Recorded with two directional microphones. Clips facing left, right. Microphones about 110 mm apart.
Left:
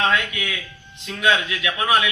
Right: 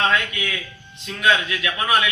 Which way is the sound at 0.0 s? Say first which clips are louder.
Even; 10° left (ahead or behind).